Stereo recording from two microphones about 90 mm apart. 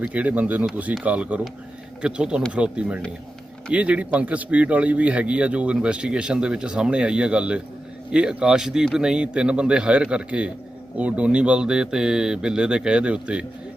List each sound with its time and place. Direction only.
0.1 s a man's voice: 15° right (ahead or behind)